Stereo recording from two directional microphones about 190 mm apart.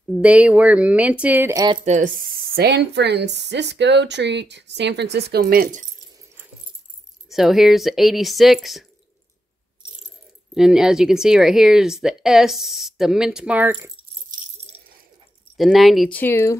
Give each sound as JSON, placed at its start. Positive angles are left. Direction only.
{"t": 0.1, "sound": "speech", "side_deg": -5}
{"t": 2.5, "sound": "speech", "side_deg": -60}
{"t": 7.2, "sound": "speech", "side_deg": 0}
{"t": 10.5, "sound": "speech", "side_deg": -5}
{"t": 15.5, "sound": "speech", "side_deg": 0}